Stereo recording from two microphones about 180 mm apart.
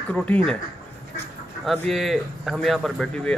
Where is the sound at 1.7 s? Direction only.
Centre (ahead or behind).